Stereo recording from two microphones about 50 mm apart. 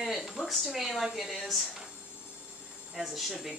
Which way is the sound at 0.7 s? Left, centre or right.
Centre.